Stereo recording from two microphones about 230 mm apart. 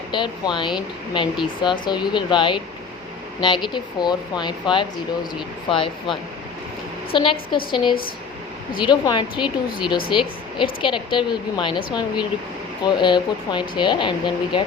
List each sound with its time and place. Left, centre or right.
0.1 s a woman's voice: centre
7.1 s a woman's voice: left